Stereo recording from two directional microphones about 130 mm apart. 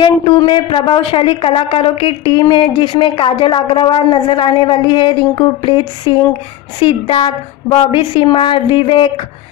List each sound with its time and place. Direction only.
0.0 s a woman's voice: 40° left (ahead or behind)